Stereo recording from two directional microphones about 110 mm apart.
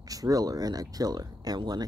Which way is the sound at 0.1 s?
35° right (ahead or behind).